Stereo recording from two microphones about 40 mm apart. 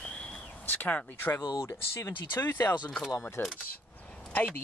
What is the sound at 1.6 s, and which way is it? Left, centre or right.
Speech, left.